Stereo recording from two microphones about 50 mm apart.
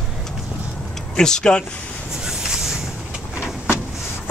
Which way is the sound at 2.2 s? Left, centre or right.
Centre.